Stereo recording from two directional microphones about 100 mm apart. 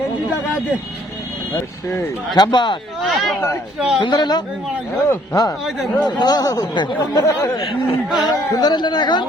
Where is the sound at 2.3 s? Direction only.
45° left (ahead or behind).